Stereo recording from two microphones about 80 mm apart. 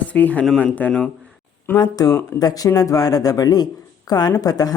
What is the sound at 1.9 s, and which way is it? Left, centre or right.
A woman's voice, left.